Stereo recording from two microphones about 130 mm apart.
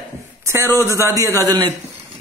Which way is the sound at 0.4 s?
25° right (ahead or behind).